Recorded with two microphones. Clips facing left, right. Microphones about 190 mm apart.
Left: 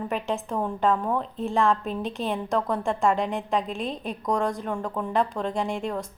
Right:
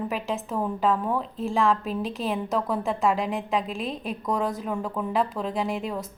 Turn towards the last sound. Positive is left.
turn(degrees=0)  # may be behind; listen again after turning